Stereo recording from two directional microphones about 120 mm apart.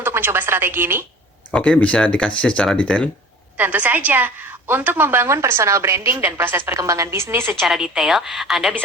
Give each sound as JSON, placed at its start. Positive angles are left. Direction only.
{"t": 0.0, "sound": "a woman's voice", "side_deg": -20}
{"t": 1.5, "sound": "speech", "side_deg": 10}
{"t": 3.6, "sound": "a woman's voice", "side_deg": -15}
{"t": 7.6, "sound": "a woman's voice", "side_deg": -5}